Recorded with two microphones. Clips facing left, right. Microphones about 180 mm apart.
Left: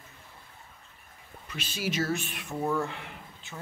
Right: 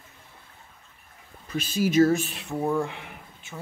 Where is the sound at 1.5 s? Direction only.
45° right (ahead or behind).